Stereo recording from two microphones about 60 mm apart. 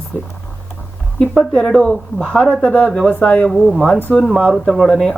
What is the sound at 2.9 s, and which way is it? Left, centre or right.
Speech, centre.